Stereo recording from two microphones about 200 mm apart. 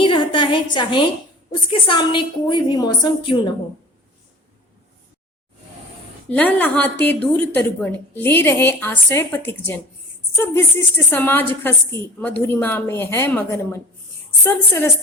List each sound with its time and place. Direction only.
0.0 s a sound: 25° left (ahead or behind)
1.9 s a woman's voice: 25° left (ahead or behind)
6.3 s a woman's voice: 10° left (ahead or behind)